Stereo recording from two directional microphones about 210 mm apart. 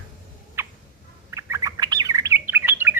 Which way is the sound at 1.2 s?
15° right (ahead or behind).